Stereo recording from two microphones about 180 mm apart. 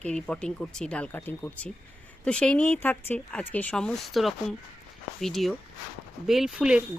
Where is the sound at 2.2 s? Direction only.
5° left (ahead or behind).